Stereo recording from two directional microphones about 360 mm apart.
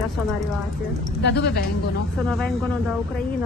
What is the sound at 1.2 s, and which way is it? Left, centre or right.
Speech, left.